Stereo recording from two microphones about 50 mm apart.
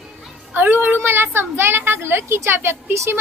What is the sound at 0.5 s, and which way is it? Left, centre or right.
Speech, right.